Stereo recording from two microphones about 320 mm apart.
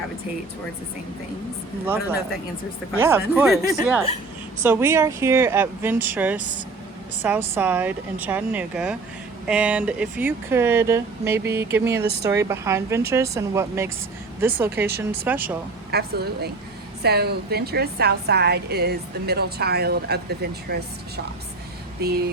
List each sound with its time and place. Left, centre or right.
1.8 s a woman's voice: centre
15.9 s a woman's voice: right
22.0 s a woman's voice: right